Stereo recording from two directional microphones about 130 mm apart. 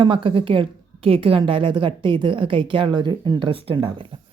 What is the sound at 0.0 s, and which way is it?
Speech, 40° right (ahead or behind).